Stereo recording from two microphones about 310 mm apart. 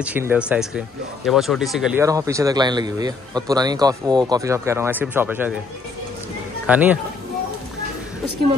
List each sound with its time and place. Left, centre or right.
0.0 s speech: centre
6.6 s speech: centre